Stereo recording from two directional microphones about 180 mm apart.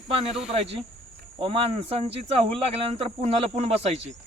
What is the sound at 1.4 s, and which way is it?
Speech, 35° right (ahead or behind).